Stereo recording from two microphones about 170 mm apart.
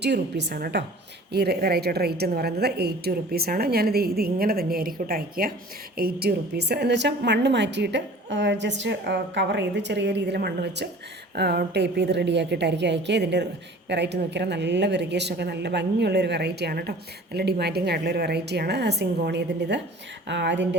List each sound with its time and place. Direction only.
0.0 s a woman's voice: 85° right